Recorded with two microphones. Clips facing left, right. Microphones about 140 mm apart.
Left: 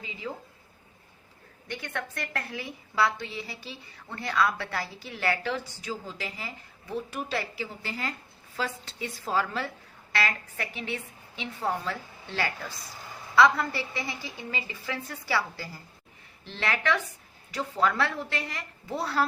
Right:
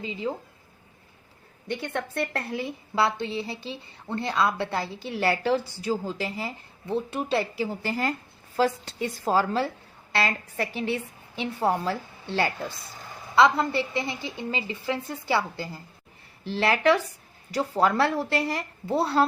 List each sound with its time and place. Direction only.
0.0 s a woman's voice: 30° right (ahead or behind)
1.6 s a woman's voice: 30° right (ahead or behind)
7.6 s a woman's voice: 40° right (ahead or behind); by 15.7 s 25° right (ahead or behind)
16.5 s a woman's voice: 35° right (ahead or behind)